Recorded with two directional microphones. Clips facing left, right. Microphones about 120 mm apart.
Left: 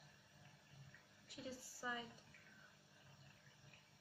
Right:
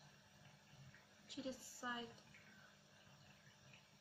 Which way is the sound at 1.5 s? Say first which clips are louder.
Left 1 dB; 20° right (ahead or behind).